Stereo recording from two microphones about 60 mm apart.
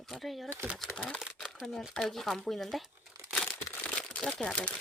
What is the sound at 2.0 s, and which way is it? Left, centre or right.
Speech, centre.